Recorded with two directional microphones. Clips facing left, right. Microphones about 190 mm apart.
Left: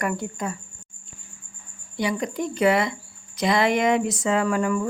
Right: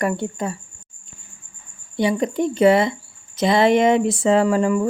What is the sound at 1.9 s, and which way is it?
Speech, 25° right (ahead or behind).